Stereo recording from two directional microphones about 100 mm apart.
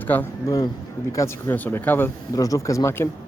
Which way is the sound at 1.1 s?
30° left (ahead or behind).